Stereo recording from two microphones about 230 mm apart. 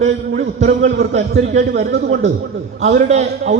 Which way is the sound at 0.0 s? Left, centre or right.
Right.